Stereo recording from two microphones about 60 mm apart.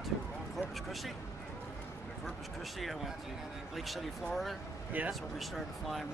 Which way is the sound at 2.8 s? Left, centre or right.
Centre.